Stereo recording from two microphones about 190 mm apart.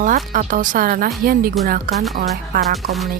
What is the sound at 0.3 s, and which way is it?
Speech, 45° right (ahead or behind).